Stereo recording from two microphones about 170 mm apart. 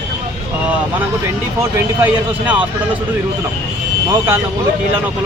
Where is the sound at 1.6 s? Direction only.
10° right (ahead or behind).